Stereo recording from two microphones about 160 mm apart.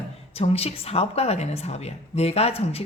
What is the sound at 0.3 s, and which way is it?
A woman's voice, 40° left (ahead or behind).